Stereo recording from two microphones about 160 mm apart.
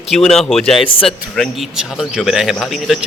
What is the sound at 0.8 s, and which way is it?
Speech, 35° left (ahead or behind).